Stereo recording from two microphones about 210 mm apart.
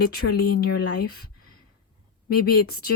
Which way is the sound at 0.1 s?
50° left (ahead or behind).